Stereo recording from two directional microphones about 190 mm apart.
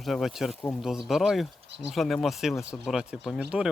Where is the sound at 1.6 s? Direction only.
65° right (ahead or behind).